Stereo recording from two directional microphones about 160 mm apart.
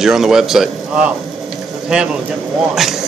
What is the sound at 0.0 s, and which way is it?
A man's voice, 5° right (ahead or behind).